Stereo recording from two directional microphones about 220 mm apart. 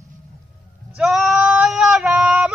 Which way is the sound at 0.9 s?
Centre (ahead or behind).